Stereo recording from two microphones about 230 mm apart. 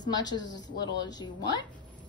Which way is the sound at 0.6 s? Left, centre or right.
Left.